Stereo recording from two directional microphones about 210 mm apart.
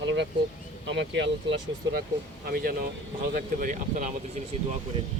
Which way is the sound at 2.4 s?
45° right (ahead or behind).